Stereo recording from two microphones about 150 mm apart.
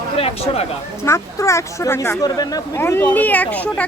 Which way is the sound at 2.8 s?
15° left (ahead or behind).